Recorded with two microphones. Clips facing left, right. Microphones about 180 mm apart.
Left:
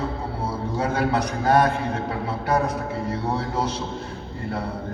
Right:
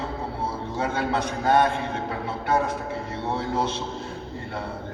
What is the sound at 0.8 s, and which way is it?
A man's voice, 25° right (ahead or behind).